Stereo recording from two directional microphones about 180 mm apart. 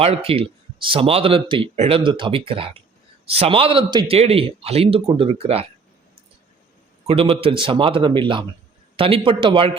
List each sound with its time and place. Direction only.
0.0 s speech: 30° right (ahead or behind)
7.1 s speech: 30° right (ahead or behind)